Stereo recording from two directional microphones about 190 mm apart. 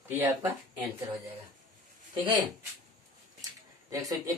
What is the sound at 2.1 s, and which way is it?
Speech, 25° right (ahead or behind).